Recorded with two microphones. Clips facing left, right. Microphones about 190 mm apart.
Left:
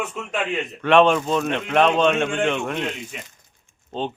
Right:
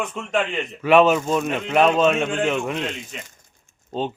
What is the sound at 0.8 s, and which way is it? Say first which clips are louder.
Speech: right 1 dB; 5° right (ahead or behind).